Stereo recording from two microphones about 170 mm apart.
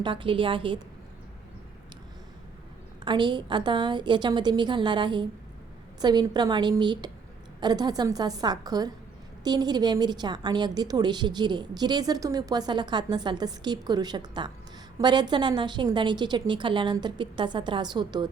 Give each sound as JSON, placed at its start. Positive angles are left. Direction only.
{"t": 0.0, "sound": "a woman's voice", "side_deg": -30}
{"t": 3.0, "sound": "a woman's voice", "side_deg": -25}